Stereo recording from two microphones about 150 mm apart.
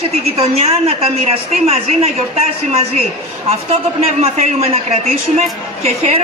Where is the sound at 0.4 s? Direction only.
45° right (ahead or behind).